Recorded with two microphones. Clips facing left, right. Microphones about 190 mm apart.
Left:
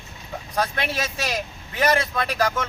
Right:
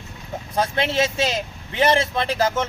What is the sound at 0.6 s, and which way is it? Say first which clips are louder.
A man's voice: right 5 dB; 25° right (ahead or behind).